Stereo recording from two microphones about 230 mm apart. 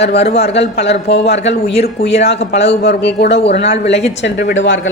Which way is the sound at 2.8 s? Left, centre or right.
Left.